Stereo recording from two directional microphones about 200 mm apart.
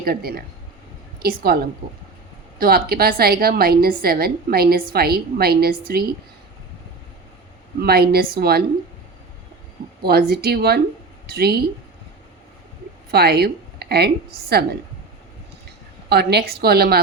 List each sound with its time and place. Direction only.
0.0 s a woman's voice: 50° right (ahead or behind)
2.6 s a woman's voice: 50° right (ahead or behind)
7.8 s a woman's voice: 50° right (ahead or behind)
10.0 s a woman's voice: 50° right (ahead or behind)
13.1 s speech: 50° right (ahead or behind)
16.0 s a woman's voice: 55° right (ahead or behind)